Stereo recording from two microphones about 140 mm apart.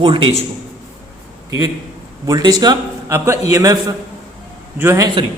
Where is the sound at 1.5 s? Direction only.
25° right (ahead or behind).